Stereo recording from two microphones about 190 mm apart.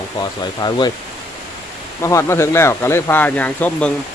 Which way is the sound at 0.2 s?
20° left (ahead or behind).